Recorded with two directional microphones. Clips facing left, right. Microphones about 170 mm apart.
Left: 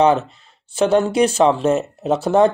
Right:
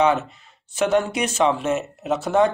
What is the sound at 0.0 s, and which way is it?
Speech, 30° left (ahead or behind).